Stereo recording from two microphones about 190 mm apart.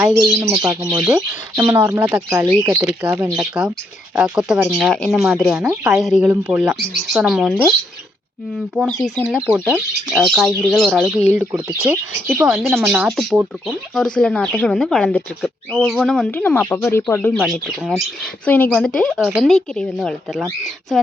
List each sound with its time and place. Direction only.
0.2 s speech: 20° right (ahead or behind); by 5.6 s centre (ahead or behind)
5.6 s speech: 15° right (ahead or behind)
6.0 s speech: 5° right (ahead or behind)
8.7 s speech: 5° right (ahead or behind)